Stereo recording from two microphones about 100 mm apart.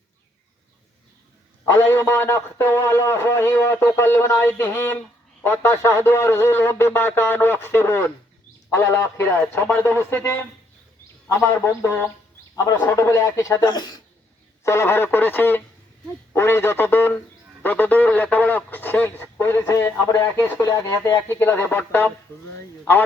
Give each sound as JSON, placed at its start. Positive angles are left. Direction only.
{"t": 1.8, "sound": "a man's voice", "side_deg": 25}
{"t": 11.3, "sound": "a man's voice", "side_deg": 25}
{"t": 13.0, "sound": "speech", "side_deg": 30}
{"t": 14.6, "sound": "a man's voice", "side_deg": 25}